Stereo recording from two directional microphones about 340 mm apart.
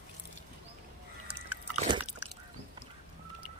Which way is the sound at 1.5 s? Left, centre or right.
Centre.